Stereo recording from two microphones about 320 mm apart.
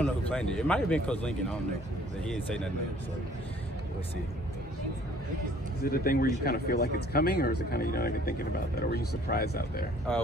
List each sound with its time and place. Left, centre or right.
0.0 s speech: centre
5.9 s speech: left